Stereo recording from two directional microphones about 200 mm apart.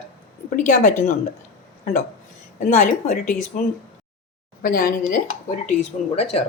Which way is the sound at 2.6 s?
40° left (ahead or behind).